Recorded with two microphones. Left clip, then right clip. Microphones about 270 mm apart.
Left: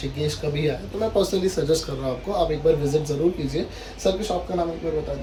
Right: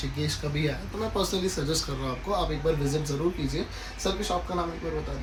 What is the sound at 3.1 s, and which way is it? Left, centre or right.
Speech, centre.